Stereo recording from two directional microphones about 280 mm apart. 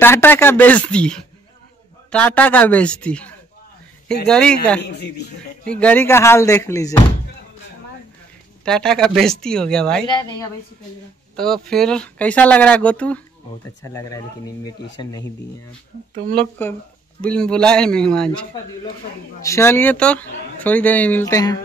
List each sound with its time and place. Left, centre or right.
0.0 s speech: centre
5.7 s speech: centre
8.6 s speech: centre
10.0 s speech: centre
11.3 s speech: centre
16.3 s speech: centre